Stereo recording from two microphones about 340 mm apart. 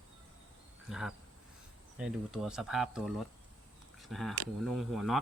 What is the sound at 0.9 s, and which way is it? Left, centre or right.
Speech, centre.